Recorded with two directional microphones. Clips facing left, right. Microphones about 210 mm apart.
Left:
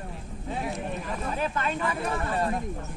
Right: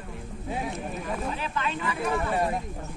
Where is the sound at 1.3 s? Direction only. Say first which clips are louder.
Left 2 dB; 45° left (ahead or behind).